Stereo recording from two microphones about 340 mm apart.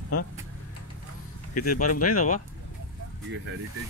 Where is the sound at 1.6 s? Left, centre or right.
Left.